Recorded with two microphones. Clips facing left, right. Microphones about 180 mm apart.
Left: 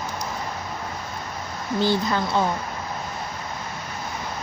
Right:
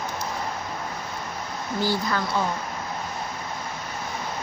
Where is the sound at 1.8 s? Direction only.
20° left (ahead or behind).